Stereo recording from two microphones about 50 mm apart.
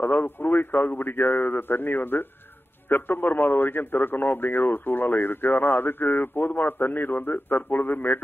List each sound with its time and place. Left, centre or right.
0.0 s a man's voice: left